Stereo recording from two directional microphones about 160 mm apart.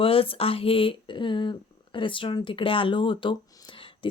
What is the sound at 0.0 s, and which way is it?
Speech, 35° left (ahead or behind).